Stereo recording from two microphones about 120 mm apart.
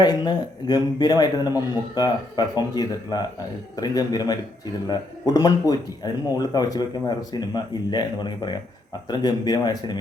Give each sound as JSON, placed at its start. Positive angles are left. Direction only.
{"t": 0.0, "sound": "speech", "side_deg": 35}